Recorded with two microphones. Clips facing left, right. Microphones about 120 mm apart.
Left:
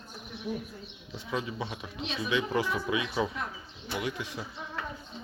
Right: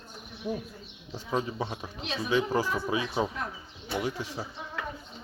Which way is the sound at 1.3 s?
35° right (ahead or behind).